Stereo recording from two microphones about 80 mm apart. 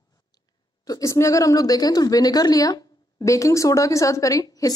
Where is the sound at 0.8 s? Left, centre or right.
Left.